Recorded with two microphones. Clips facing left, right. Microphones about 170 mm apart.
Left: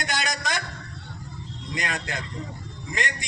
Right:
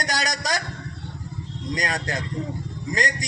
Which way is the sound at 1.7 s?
40° right (ahead or behind).